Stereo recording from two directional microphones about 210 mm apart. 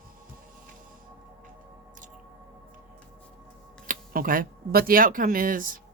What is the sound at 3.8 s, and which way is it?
Speech, 40° right (ahead or behind).